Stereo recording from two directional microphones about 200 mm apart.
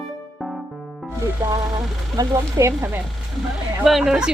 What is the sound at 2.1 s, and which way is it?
Speech, 15° right (ahead or behind).